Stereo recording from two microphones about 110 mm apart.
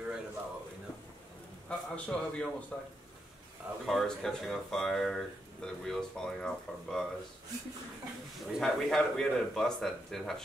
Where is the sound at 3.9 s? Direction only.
5° left (ahead or behind).